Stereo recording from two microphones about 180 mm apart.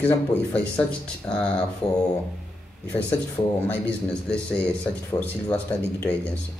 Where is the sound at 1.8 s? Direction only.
35° left (ahead or behind).